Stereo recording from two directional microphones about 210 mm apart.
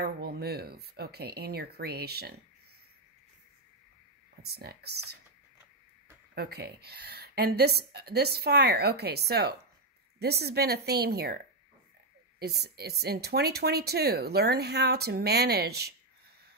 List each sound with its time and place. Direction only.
0.0 s speech: 45° right (ahead or behind)
4.4 s speech: 50° right (ahead or behind)
6.3 s speech: 50° right (ahead or behind)